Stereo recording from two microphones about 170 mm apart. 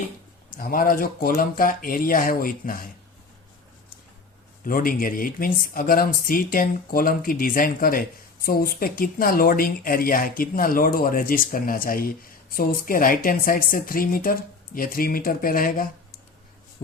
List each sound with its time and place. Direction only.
0.5 s speech: 55° left (ahead or behind)
4.6 s speech: 55° left (ahead or behind)